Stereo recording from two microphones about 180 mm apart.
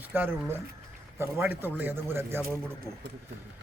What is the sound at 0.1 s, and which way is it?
A man's voice, 10° right (ahead or behind).